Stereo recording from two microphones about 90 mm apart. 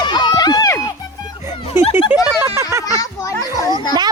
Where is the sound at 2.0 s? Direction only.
10° right (ahead or behind).